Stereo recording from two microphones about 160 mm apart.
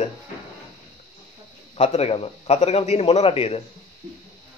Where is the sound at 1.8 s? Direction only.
40° left (ahead or behind).